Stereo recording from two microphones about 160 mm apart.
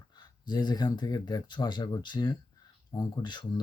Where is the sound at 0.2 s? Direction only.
25° left (ahead or behind).